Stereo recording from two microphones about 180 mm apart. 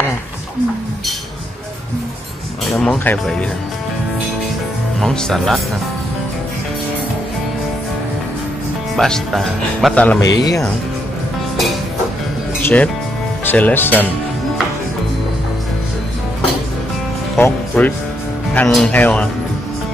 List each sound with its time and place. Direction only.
2.6 s speech: centre (ahead or behind)
5.0 s speech: centre (ahead or behind)
8.9 s speech: 5° left (ahead or behind)
10.2 s speech: 20° left (ahead or behind)
12.6 s speech: 10° left (ahead or behind)
17.4 s speech: 10° left (ahead or behind)